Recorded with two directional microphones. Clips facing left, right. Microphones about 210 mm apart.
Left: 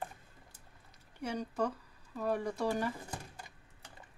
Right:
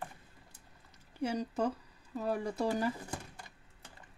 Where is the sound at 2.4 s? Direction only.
25° right (ahead or behind).